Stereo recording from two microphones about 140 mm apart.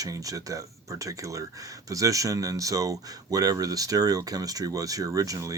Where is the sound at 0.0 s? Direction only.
25° right (ahead or behind).